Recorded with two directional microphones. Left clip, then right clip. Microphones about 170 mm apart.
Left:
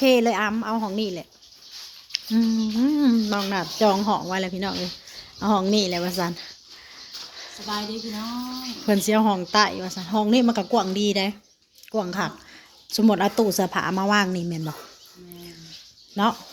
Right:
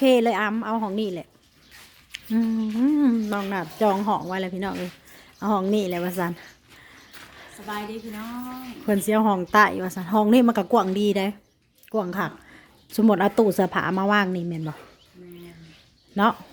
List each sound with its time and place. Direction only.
0.0 s speech: 30° right (ahead or behind)
7.7 s a woman's voice: 5° right (ahead or behind)
9.0 s speech: 25° right (ahead or behind)
16.2 s speech: 35° right (ahead or behind)